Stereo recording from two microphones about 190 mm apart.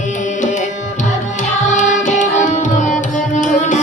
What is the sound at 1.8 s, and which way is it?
Music, 40° left (ahead or behind).